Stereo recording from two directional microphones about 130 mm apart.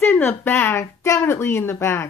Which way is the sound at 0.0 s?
15° left (ahead or behind).